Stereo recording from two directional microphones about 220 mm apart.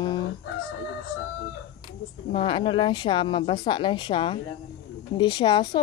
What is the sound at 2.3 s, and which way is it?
Speech, 20° left (ahead or behind).